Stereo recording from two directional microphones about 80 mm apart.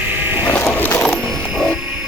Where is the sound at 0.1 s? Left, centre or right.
Right.